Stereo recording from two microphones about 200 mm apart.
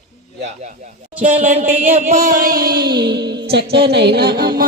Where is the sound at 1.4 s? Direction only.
40° right (ahead or behind).